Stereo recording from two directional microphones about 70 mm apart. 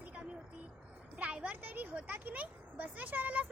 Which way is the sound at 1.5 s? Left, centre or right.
Right.